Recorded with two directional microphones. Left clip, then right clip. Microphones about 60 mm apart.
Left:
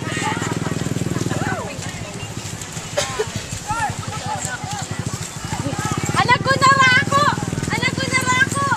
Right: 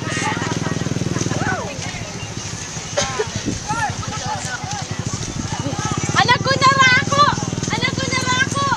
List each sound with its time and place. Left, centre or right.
0.1 s vehicle: right
0.5 s vehicle: right
3.7 s a sound: centre
5.8 s horse: right
6.1 s horse: right
7.7 s a sound: right